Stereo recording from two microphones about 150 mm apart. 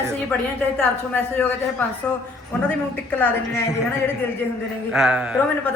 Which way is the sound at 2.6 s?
10° left (ahead or behind).